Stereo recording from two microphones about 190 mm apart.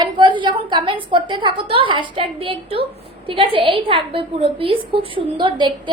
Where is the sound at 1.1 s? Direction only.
25° right (ahead or behind).